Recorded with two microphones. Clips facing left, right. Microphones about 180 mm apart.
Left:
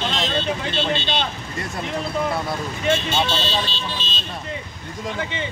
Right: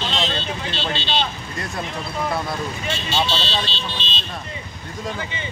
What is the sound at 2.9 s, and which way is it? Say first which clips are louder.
Speech: left 4 dB; 50° left (ahead or behind).